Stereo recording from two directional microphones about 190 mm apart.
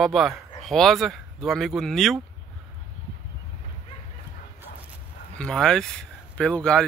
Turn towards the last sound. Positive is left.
turn(degrees=5)  # may be behind; listen again after turning